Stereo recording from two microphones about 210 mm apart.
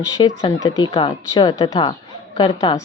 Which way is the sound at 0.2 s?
20° left (ahead or behind).